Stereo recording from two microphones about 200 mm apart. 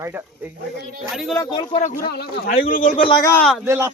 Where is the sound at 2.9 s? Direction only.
25° left (ahead or behind).